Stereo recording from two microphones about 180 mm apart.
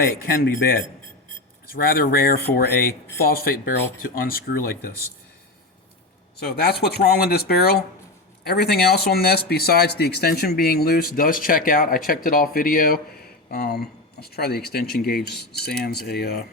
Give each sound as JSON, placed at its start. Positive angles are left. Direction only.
{"t": 0.0, "sound": "speech", "side_deg": 55}
{"t": 6.4, "sound": "speech", "side_deg": 60}